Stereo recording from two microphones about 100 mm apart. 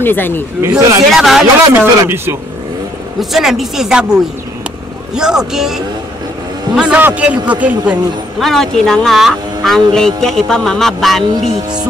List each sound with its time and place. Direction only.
0.0 s speech: 20° left (ahead or behind)
0.6 s speech: 30° right (ahead or behind)
1.1 s speech: centre (ahead or behind)
1.7 s speech: 25° right (ahead or behind)
3.2 s speech: 5° right (ahead or behind)
6.8 s a man's voice: 15° right (ahead or behind)
8.4 s speech: 5° left (ahead or behind)